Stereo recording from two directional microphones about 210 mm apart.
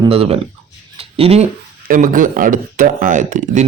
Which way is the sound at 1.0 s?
25° right (ahead or behind).